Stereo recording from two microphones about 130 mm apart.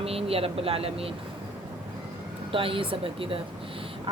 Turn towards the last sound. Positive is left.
turn(degrees=-45)  # may be behind; listen again after turning